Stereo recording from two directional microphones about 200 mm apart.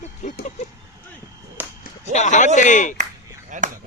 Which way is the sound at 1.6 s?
10° right (ahead or behind).